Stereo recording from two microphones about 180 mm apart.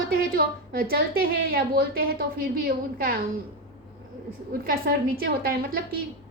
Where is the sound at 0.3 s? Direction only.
55° right (ahead or behind).